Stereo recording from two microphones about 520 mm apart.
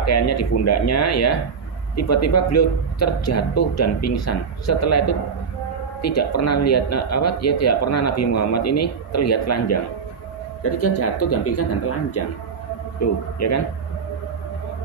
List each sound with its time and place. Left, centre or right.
0.0 s speech: left